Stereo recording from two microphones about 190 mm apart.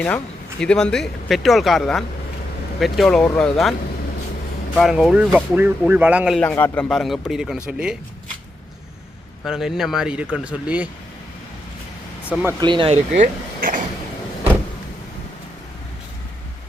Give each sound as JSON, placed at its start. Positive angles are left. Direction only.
{"t": 0.6, "sound": "speech", "side_deg": 5}
{"t": 6.4, "sound": "speech", "side_deg": 10}
{"t": 9.4, "sound": "speech", "side_deg": 0}
{"t": 12.5, "sound": "speech", "side_deg": -25}